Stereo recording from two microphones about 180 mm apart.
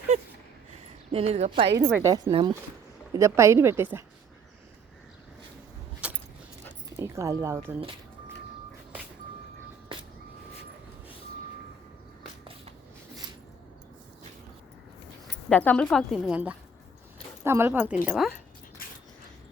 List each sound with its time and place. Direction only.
1.1 s speech: 35° right (ahead or behind)
1.9 s speech: 15° right (ahead or behind)
2.3 s speech: 25° right (ahead or behind)
6.0 s keys jangling: 5° right (ahead or behind)
6.9 s speech: 15° right (ahead or behind)
15.4 s a woman's voice: 5° left (ahead or behind)